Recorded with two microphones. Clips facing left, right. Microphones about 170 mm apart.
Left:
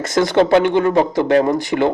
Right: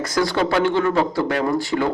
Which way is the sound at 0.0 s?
25° left (ahead or behind).